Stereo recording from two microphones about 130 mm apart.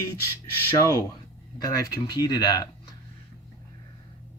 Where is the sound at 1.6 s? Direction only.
30° left (ahead or behind).